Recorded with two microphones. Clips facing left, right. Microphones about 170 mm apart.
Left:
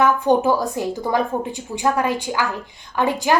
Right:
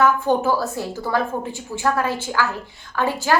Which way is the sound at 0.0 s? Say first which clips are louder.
Left 2 dB; 15° left (ahead or behind).